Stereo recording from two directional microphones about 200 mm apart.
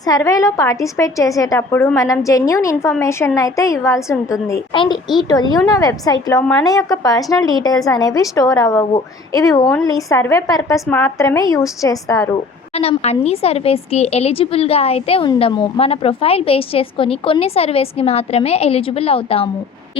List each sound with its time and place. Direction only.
0.0 s a woman's voice: 15° left (ahead or behind)
12.7 s speech: 30° left (ahead or behind)